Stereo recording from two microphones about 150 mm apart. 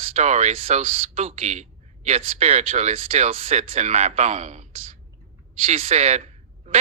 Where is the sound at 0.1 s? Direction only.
45° right (ahead or behind).